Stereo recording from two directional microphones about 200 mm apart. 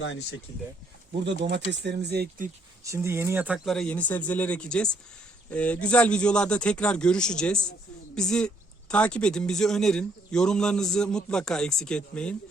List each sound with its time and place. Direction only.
0.0 s speech: 65° left (ahead or behind)
1.2 s speech: 60° right (ahead or behind)
2.8 s speech: 15° right (ahead or behind); by 12.4 s 5° left (ahead or behind)